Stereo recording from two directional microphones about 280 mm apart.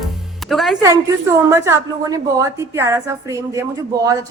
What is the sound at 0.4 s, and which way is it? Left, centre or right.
A woman's voice, centre.